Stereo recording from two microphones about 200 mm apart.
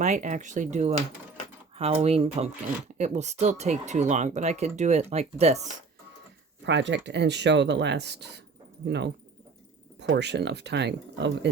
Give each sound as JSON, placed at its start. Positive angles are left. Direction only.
{"t": 0.0, "sound": "speech", "side_deg": -35}
{"t": 6.7, "sound": "speech", "side_deg": -65}
{"t": 10.0, "sound": "speech", "side_deg": -60}